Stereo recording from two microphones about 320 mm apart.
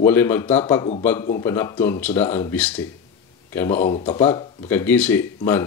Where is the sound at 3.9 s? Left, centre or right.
Centre.